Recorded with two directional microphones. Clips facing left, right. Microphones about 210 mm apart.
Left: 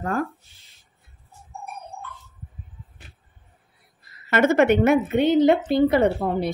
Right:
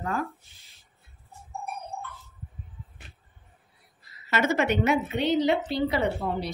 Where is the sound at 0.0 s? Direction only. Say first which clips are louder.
Left 5 dB; 50° left (ahead or behind).